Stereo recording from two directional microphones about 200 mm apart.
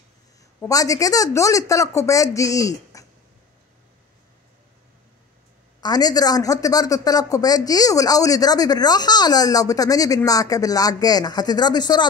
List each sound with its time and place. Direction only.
0.6 s speech: 15° left (ahead or behind)
5.8 s a man's voice: 20° left (ahead or behind)